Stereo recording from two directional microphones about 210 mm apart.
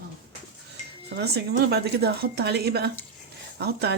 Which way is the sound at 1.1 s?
50° right (ahead or behind).